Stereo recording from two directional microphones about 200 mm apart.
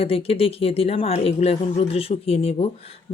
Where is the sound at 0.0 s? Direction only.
30° left (ahead or behind).